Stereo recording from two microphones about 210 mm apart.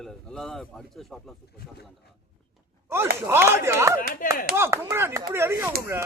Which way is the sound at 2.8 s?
10° right (ahead or behind).